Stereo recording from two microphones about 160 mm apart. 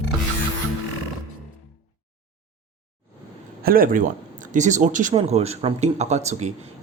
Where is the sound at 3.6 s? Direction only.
65° right (ahead or behind).